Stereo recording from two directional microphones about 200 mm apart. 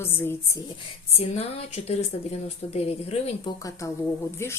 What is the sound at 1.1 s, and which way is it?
Speech, 30° left (ahead or behind).